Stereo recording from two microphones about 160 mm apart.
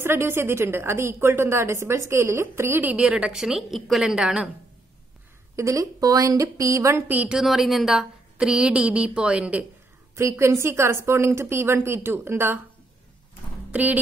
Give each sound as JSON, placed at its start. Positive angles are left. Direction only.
{"t": 0.0, "sound": "a woman's voice", "side_deg": -15}
{"t": 5.6, "sound": "a woman's voice", "side_deg": -20}
{"t": 13.7, "sound": "speech", "side_deg": -10}